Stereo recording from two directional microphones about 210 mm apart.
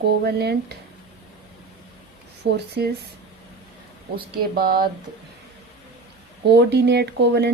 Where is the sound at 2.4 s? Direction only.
50° right (ahead or behind).